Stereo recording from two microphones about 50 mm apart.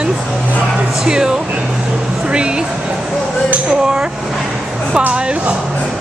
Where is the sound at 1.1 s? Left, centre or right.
Centre.